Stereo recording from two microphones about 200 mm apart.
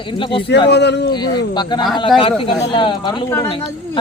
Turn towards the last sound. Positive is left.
turn(degrees=25)  # may be behind; listen again after turning